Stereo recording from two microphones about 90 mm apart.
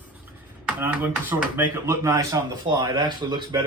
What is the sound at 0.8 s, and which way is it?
A man's voice, 20° right (ahead or behind).